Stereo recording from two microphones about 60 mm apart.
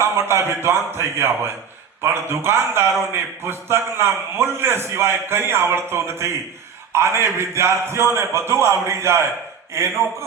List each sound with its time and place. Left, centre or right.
0.0 s a man's voice: right